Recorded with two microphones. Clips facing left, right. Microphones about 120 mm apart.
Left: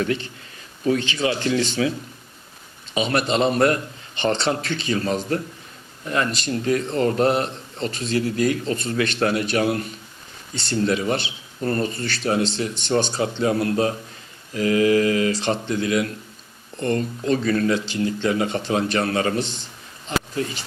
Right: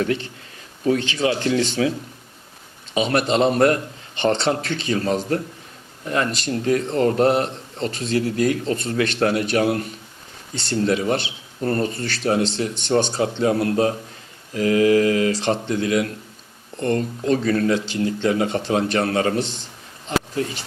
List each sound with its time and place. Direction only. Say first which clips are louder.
0.0 s speech: right 1 dB; 50° right (ahead or behind)
2.9 s speech: right 2 dB; 50° right (ahead or behind)
4.1 s speech: right 2 dB; 60° right (ahead or behind)
4.5 s speech: right 1 dB; 45° right (ahead or behind)
12.5 s speech: right 1 dB; 60° right (ahead or behind)
13.4 s speech: right 2 dB; 40° right (ahead or behind)